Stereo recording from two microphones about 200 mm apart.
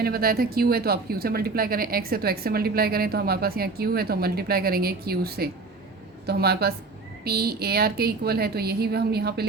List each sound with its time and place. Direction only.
0.0 s speech: 50° right (ahead or behind)